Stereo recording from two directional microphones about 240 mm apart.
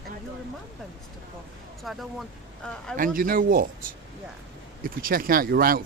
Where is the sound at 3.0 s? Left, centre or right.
Right.